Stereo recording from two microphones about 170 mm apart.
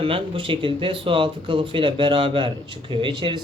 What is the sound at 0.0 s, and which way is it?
Speech, 30° right (ahead or behind).